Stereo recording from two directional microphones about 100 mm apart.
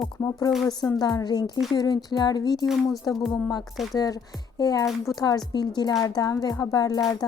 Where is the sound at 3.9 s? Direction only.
35° left (ahead or behind).